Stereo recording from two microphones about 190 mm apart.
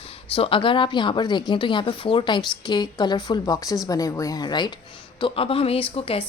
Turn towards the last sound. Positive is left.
turn(degrees=30)  # may be behind; listen again after turning